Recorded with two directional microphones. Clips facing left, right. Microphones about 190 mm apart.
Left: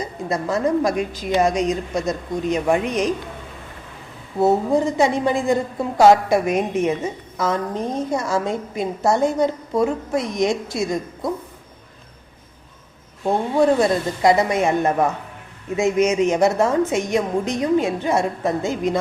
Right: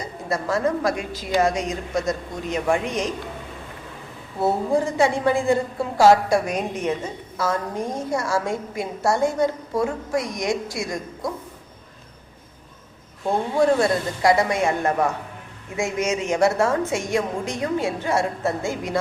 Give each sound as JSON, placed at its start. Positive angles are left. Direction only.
{"t": 0.0, "sound": "a woman's voice", "side_deg": 20}
{"t": 4.4, "sound": "a woman's voice", "side_deg": 20}
{"t": 13.7, "sound": "a woman's voice", "side_deg": 20}